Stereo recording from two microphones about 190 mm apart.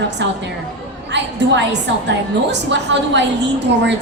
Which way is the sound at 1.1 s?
65° right (ahead or behind).